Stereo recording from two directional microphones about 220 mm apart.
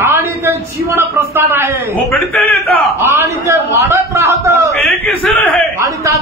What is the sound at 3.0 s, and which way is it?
A man's voice, 10° right (ahead or behind).